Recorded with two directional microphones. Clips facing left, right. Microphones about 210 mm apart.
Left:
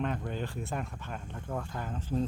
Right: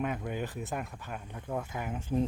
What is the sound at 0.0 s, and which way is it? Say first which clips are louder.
Speech: even; 10° right (ahead or behind).